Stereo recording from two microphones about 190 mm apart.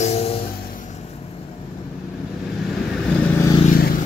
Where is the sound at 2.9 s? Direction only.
5° left (ahead or behind).